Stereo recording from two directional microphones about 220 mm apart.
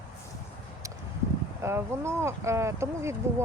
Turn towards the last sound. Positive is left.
turn(degrees=-10)  # may be behind; listen again after turning